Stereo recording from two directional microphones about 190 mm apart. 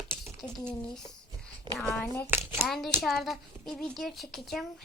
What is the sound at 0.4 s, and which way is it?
Speech, 5° left (ahead or behind).